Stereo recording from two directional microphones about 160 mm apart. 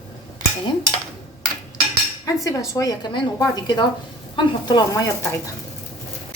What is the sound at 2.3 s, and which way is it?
Speech, 20° left (ahead or behind).